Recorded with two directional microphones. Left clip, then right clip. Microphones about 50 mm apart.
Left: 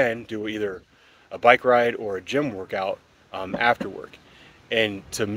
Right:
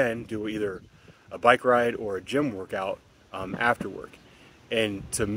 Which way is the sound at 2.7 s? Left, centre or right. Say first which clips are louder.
Left 4 dB; centre.